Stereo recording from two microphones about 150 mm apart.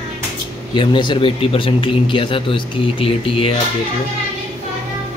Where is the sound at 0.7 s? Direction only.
30° left (ahead or behind).